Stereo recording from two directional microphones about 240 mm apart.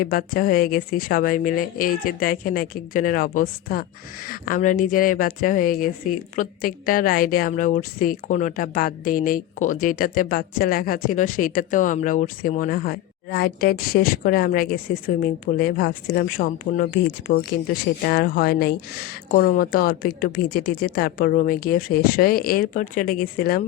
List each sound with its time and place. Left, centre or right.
0.0 s speech: left